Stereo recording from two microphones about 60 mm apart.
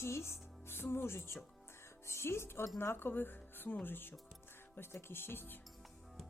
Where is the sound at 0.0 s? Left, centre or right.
Left.